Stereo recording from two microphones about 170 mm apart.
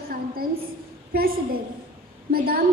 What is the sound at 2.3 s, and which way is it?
Speech, 60° right (ahead or behind).